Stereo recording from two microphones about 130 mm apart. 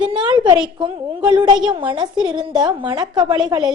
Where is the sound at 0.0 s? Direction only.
35° right (ahead or behind).